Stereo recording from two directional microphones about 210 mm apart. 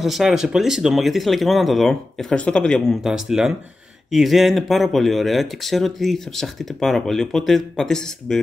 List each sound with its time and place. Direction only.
0.0 s speech: centre (ahead or behind)